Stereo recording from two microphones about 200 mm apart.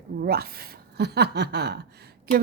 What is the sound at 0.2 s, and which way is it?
Speech, 50° right (ahead or behind).